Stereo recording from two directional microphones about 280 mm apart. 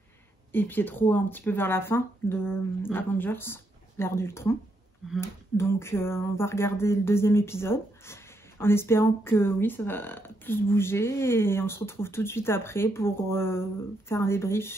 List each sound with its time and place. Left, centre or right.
0.5 s speech: centre